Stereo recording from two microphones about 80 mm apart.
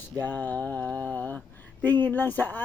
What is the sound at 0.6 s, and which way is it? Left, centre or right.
Mantra, centre.